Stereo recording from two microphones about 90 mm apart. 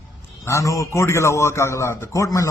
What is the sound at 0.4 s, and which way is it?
A man's voice, 35° left (ahead or behind).